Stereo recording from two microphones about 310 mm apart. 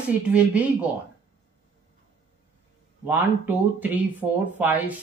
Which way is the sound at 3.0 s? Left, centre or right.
Centre.